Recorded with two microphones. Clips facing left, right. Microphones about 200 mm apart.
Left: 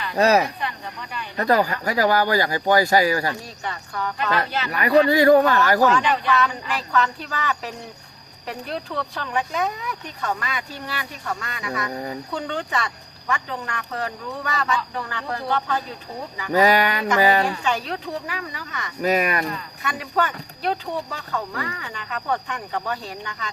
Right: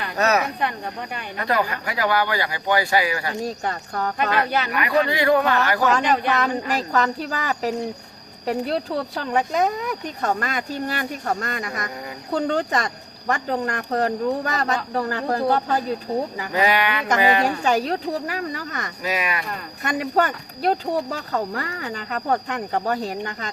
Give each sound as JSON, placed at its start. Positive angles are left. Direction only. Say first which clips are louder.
{"t": 0.2, "sound": "speech", "louder": "left 3 dB", "side_deg": 30}
{"t": 3.4, "sound": "speech", "louder": "right 7 dB", "side_deg": -45}
{"t": 4.7, "sound": "speech", "louder": "left 8 dB", "side_deg": 40}
{"t": 5.9, "sound": "speech", "louder": "right 1 dB", "side_deg": -45}
{"t": 16.5, "sound": "speech", "louder": "left 5 dB", "side_deg": 40}
{"t": 17.4, "sound": "speech", "louder": "right 4 dB", "side_deg": -40}
{"t": 19.0, "sound": "speech", "louder": "left 6 dB", "side_deg": 45}
{"t": 19.5, "sound": "speech", "louder": "right 5 dB", "side_deg": -45}